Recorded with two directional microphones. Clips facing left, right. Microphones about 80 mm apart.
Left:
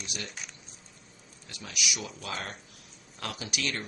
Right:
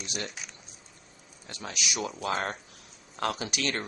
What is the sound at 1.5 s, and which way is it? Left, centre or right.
Speech, right.